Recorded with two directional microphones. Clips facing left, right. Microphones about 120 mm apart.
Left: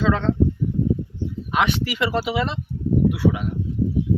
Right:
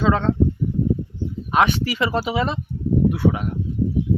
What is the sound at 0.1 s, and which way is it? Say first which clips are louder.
Speech: right 2 dB; 45° right (ahead or behind).